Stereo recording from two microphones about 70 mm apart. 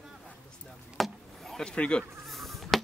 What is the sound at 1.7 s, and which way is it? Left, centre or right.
Speech, centre.